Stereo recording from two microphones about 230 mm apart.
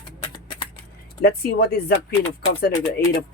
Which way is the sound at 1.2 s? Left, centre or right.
Left.